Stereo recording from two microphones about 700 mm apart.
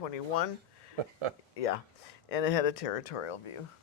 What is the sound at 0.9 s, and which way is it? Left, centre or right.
Speech, right.